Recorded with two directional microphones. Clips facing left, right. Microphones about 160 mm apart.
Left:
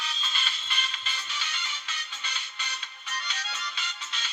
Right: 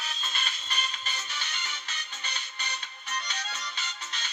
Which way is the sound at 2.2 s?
45° right (ahead or behind).